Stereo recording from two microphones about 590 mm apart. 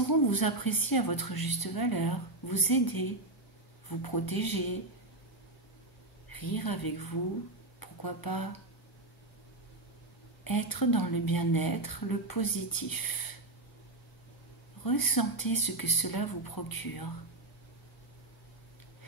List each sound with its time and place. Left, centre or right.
0.1 s a woman's voice: left
6.2 s speech: left
10.4 s a woman's voice: left
14.8 s a woman's voice: left